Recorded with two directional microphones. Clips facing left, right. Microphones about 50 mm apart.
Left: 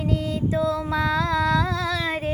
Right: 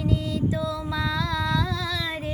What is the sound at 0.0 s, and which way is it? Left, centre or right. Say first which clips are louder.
Mantra: left 1 dB; left.